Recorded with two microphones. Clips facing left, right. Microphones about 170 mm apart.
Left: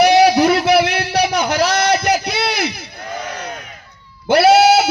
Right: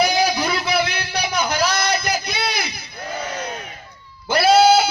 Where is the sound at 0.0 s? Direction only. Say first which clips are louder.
Left 8 dB; 75° left (ahead or behind).